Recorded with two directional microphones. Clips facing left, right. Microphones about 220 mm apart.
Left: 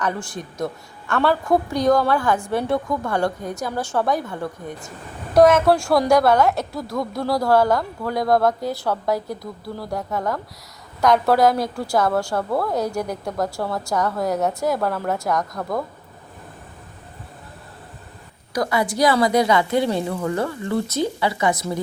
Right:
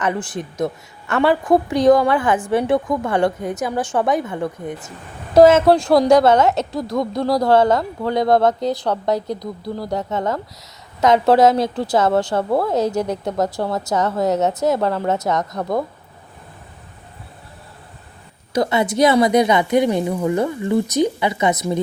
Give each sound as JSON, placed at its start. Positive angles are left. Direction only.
{"t": 0.0, "sound": "a woman's voice", "side_deg": -20}
{"t": 18.5, "sound": "a woman's voice", "side_deg": -25}